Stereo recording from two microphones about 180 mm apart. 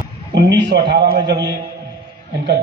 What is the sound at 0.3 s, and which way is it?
A man's voice, 75° right (ahead or behind).